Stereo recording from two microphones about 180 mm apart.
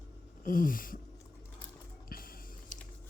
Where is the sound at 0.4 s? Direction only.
50° left (ahead or behind).